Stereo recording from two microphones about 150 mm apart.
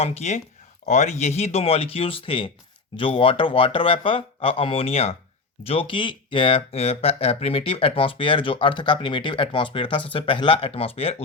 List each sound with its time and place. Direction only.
0.0 s speech: 45° left (ahead or behind)